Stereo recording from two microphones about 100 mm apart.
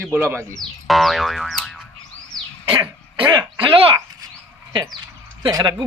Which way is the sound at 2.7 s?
45° right (ahead or behind).